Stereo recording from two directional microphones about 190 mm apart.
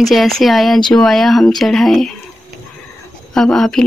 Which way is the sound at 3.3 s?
Centre (ahead or behind).